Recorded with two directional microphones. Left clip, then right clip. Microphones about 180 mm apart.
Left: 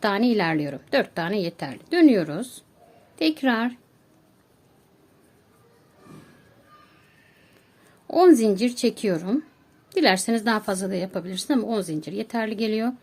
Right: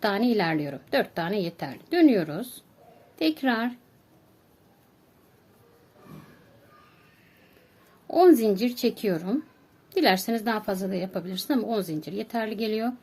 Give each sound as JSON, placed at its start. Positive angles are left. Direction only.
{"t": 0.0, "sound": "a woman's voice", "side_deg": 15}
{"t": 8.0, "sound": "a woman's voice", "side_deg": 15}